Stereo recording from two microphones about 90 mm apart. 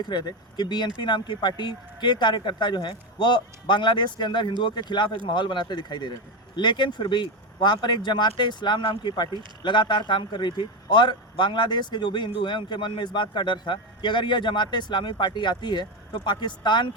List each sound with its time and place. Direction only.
0.0 s speech: 50° left (ahead or behind)